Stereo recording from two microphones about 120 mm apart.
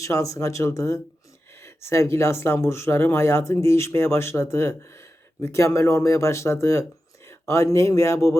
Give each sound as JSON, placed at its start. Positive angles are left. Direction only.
{"t": 0.0, "sound": "speech", "side_deg": 25}